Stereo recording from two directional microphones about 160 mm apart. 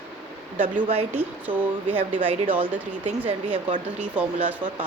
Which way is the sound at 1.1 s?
10° right (ahead or behind).